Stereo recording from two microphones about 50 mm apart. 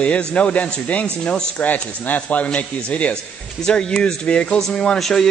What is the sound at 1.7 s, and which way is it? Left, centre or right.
Speech, left.